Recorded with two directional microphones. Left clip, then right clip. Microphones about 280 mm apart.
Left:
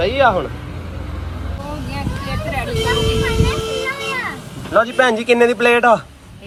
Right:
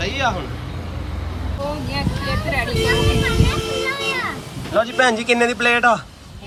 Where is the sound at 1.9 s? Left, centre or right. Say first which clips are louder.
Right 2 dB; centre.